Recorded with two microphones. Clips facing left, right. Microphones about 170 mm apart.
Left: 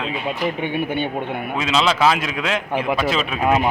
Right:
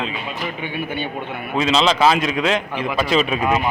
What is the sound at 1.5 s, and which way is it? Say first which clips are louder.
A man's voice: right 3 dB; 5° left (ahead or behind).